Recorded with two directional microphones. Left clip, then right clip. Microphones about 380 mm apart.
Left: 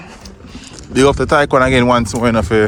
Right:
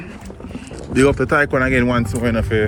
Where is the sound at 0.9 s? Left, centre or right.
Centre.